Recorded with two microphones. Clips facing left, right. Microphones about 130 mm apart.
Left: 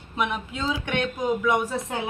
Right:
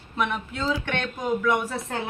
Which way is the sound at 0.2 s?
15° left (ahead or behind).